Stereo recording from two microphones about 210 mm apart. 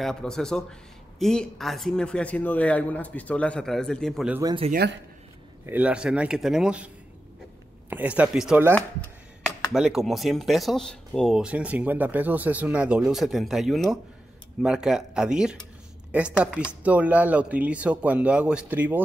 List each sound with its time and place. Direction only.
0.0 s speech: 5° left (ahead or behind)
4.3 s speech: 15° right (ahead or behind)
5.7 s speech: 5° right (ahead or behind)
7.9 s speech: 5° right (ahead or behind)